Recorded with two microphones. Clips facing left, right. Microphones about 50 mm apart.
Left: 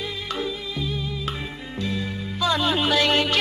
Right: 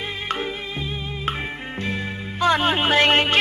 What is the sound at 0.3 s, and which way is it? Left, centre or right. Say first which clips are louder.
Music: right 2 dB; right.